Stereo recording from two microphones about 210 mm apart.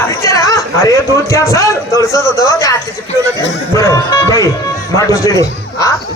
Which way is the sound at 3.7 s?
15° left (ahead or behind).